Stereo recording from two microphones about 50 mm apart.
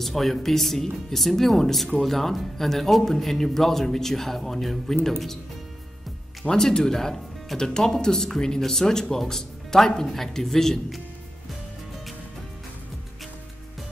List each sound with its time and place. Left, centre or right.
0.0 s speech: centre
6.4 s speech: centre